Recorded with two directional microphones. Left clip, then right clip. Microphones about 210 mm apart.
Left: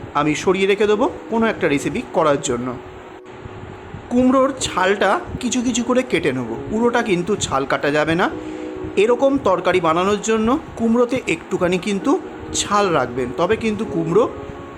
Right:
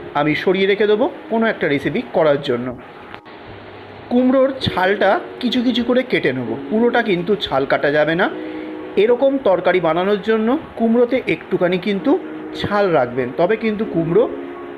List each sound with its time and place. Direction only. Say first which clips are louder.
0.1 s speech: right 1 dB; 5° right (ahead or behind)
4.1 s speech: right 1 dB; centre (ahead or behind)